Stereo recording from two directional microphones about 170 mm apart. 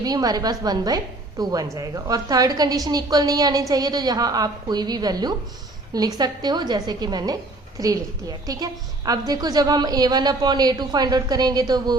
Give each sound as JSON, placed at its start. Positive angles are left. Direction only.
{"t": 0.0, "sound": "a woman's voice", "side_deg": -20}